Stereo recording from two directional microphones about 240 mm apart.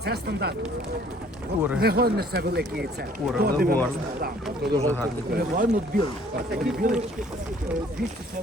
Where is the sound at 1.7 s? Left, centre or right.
Right.